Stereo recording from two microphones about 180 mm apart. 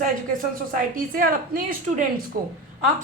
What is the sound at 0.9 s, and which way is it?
A woman's voice, 55° right (ahead or behind).